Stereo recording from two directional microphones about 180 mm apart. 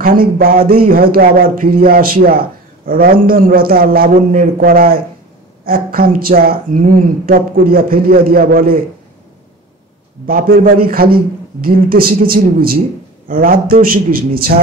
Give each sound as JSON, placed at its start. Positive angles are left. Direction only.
{"t": 0.0, "sound": "speech", "side_deg": -55}
{"t": 10.2, "sound": "a man's voice", "side_deg": -55}